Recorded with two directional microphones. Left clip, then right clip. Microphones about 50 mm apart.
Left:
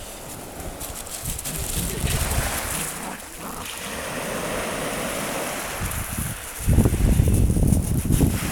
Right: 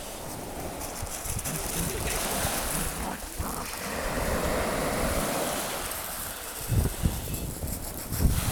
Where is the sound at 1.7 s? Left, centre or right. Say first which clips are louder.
Left 4 dB; centre.